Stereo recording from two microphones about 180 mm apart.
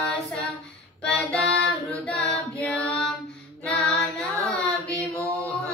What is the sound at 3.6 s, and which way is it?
Child singing, 5° left (ahead or behind).